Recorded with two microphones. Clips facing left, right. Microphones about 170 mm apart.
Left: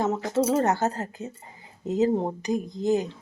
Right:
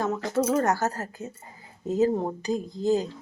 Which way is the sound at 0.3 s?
25° left (ahead or behind).